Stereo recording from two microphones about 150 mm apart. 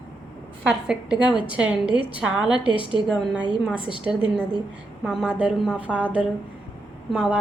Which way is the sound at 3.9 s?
35° left (ahead or behind).